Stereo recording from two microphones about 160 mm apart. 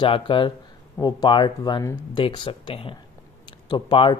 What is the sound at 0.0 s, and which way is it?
Speech, 30° left (ahead or behind).